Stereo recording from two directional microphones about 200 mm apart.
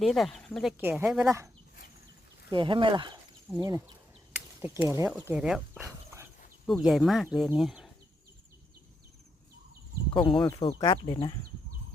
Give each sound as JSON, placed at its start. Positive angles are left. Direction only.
{"t": 0.0, "sound": "speech", "side_deg": 0}
{"t": 0.8, "sound": "speech", "side_deg": -10}
{"t": 2.5, "sound": "speech", "side_deg": -25}
{"t": 10.2, "sound": "speech", "side_deg": 0}
{"t": 10.5, "sound": "speech", "side_deg": 20}